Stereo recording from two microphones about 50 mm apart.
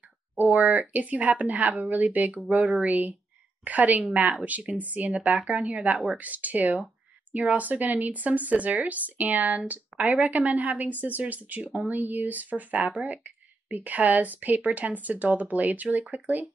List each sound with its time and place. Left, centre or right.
0.4 s speech: right